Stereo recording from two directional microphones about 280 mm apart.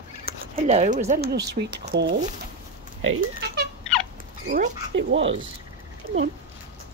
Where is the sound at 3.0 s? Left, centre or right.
Right.